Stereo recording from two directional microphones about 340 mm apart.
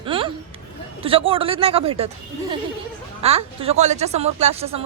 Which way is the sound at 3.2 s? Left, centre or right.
Centre.